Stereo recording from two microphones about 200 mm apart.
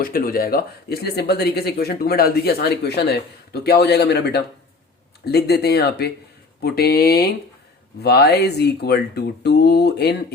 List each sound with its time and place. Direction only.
0.0 s speech: 45° left (ahead or behind)